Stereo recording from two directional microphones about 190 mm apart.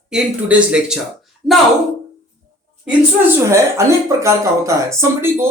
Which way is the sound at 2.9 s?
10° right (ahead or behind).